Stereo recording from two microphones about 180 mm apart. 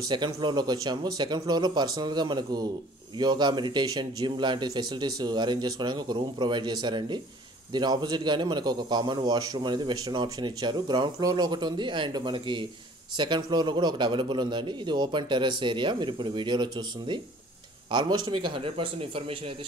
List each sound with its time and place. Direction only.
0.1 s a man's voice: 25° right (ahead or behind)